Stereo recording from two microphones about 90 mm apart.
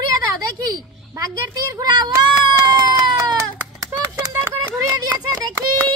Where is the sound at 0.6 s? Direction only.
50° right (ahead or behind).